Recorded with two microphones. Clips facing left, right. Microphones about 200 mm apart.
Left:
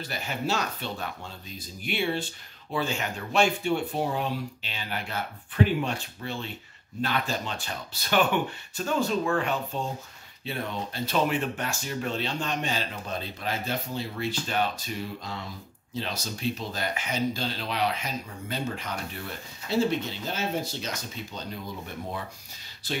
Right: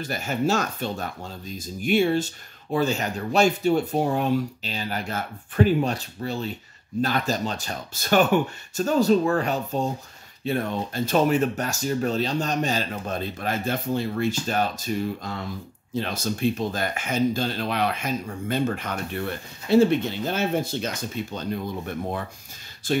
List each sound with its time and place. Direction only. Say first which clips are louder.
0.0 s speech: right 7 dB; 45° right (ahead or behind)
22.8 s speech: right 9 dB; 50° right (ahead or behind)